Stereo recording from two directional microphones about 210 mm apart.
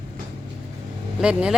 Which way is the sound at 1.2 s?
5° right (ahead or behind).